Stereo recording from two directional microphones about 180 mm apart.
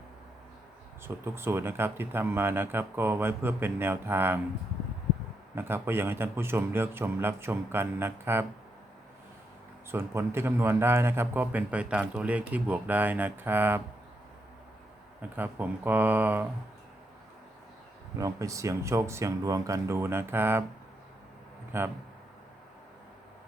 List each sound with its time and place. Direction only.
1.0 s a man's voice: 15° right (ahead or behind)
5.5 s a man's voice: 10° right (ahead or behind)
9.9 s a man's voice: 15° right (ahead or behind)
15.2 s a man's voice: 10° right (ahead or behind)
18.2 s a man's voice: 15° right (ahead or behind)
21.7 s a man's voice: 15° right (ahead or behind)